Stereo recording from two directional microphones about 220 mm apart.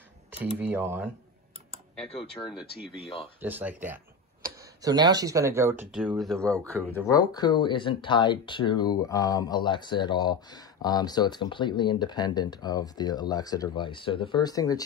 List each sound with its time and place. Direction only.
0.6 s speech: 10° right (ahead or behind)
2.4 s speech: 20° left (ahead or behind)
3.3 s speech: 10° right (ahead or behind)
7.1 s speech: 15° left (ahead or behind)